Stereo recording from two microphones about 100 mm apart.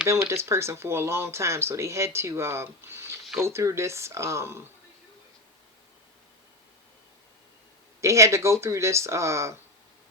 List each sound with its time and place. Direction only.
0.1 s speech: 30° right (ahead or behind)
8.0 s speech: 30° right (ahead or behind)